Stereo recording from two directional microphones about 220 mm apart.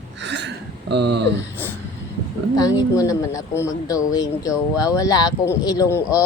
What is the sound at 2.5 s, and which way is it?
Speech, 15° left (ahead or behind).